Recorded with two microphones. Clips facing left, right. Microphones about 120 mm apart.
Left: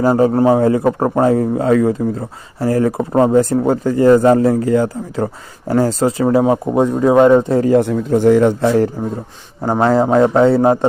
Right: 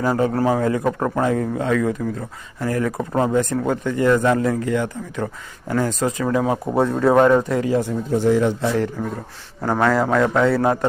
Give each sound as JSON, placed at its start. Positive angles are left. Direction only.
{"t": 0.0, "sound": "a man's voice", "side_deg": 30}
{"t": 6.7, "sound": "speech", "side_deg": 15}
{"t": 7.8, "sound": "speech", "side_deg": 65}
{"t": 9.6, "sound": "a man's voice", "side_deg": 25}